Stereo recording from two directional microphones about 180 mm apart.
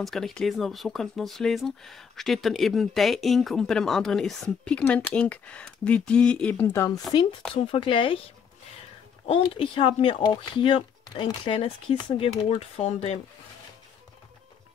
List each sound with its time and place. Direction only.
0.0 s speech: centre (ahead or behind); by 8.2 s 30° left (ahead or behind)
9.3 s speech: 30° left (ahead or behind)